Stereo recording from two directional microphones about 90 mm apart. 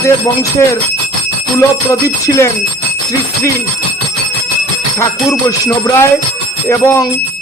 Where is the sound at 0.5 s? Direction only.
35° left (ahead or behind).